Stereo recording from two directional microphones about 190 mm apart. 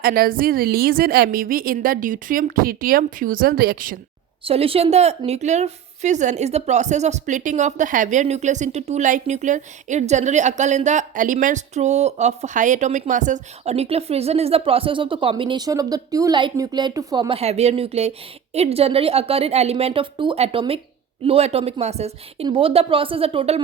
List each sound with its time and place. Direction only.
0.0 s a woman's voice: 50° right (ahead or behind)
4.4 s a woman's voice: 30° right (ahead or behind)